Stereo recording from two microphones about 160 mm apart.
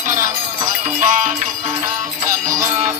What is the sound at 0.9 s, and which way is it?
Music, 55° right (ahead or behind).